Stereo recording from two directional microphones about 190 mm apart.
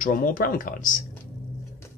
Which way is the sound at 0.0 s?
45° left (ahead or behind).